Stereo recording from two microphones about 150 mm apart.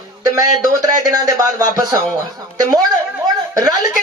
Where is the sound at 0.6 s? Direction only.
25° right (ahead or behind).